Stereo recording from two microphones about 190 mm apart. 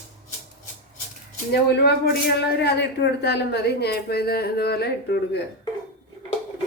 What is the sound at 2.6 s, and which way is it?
A woman's voice, 60° left (ahead or behind).